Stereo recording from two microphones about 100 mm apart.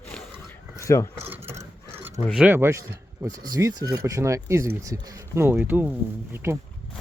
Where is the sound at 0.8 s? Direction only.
30° left (ahead or behind).